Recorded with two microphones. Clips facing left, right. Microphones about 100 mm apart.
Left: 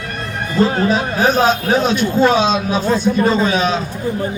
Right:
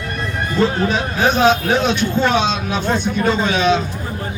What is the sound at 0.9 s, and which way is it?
A man's voice, 40° left (ahead or behind).